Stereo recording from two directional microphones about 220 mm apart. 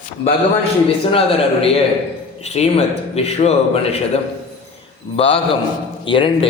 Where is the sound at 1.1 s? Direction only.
25° left (ahead or behind).